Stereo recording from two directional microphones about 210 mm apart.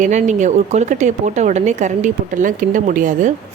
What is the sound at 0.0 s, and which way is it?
Speech, 35° right (ahead or behind).